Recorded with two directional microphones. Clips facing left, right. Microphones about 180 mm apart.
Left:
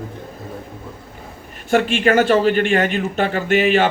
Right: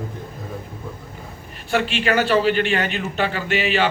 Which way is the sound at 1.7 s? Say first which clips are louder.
Left 5 dB; 50° left (ahead or behind).